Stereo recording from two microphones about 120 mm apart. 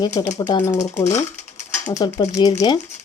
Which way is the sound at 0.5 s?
25° left (ahead or behind).